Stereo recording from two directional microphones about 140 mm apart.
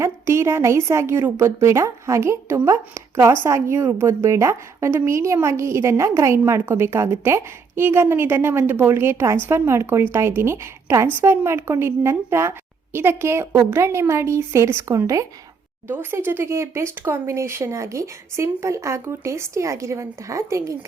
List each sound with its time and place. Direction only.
0.0 s a woman's voice: 20° right (ahead or behind)